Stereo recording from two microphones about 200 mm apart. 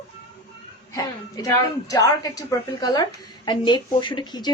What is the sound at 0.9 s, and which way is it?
A woman's voice, 15° left (ahead or behind).